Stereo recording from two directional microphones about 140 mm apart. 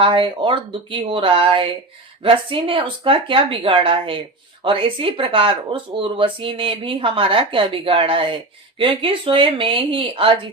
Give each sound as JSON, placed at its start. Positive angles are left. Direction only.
{"t": 0.0, "sound": "speech", "side_deg": -35}